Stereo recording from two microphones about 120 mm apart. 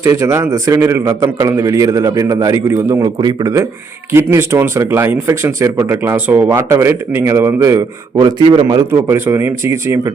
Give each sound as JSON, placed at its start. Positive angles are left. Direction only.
{"t": 0.0, "sound": "a man's voice", "side_deg": -20}
{"t": 8.1, "sound": "a man's voice", "side_deg": -40}
{"t": 8.7, "sound": "a man's voice", "side_deg": -25}